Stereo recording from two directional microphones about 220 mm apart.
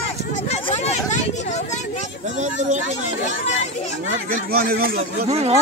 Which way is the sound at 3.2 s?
30° left (ahead or behind).